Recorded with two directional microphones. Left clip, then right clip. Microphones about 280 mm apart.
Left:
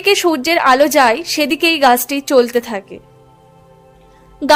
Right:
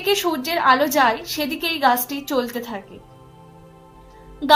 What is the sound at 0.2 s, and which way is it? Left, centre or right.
A woman's voice, left.